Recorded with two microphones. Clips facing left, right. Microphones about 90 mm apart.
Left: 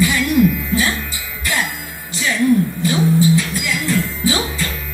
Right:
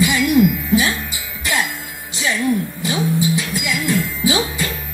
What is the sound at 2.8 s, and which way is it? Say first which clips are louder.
Music: left 4 dB; 20° right (ahead or behind).